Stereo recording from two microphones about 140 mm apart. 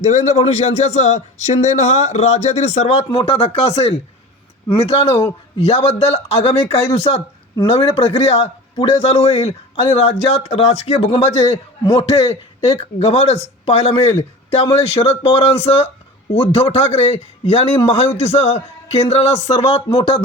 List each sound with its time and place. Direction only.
0.0 s a man's voice: 55° left (ahead or behind)